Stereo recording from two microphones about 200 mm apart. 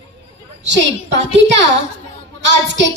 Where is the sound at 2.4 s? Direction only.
65° right (ahead or behind).